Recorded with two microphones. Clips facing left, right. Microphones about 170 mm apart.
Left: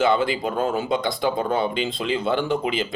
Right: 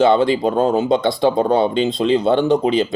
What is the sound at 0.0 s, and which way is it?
Speech, 25° right (ahead or behind).